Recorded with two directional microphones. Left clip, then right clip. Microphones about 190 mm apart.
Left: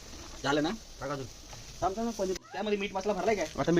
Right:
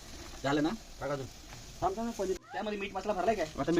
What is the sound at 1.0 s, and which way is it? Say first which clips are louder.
Speech: right 1 dB; 10° left (ahead or behind).